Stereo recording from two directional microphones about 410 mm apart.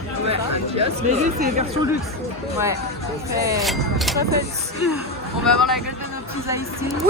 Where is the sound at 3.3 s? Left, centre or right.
Centre.